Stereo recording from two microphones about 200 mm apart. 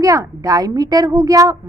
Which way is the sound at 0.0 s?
15° right (ahead or behind).